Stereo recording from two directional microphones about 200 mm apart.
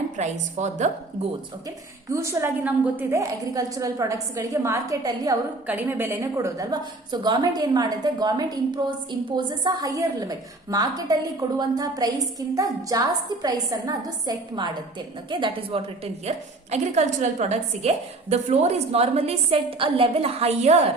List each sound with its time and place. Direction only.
0.2 s a woman's voice: 35° right (ahead or behind)
2.0 s a woman's voice: 15° right (ahead or behind); by 20.9 s 35° right (ahead or behind)